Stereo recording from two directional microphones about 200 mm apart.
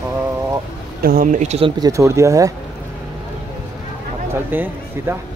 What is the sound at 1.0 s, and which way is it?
Speech, 45° right (ahead or behind).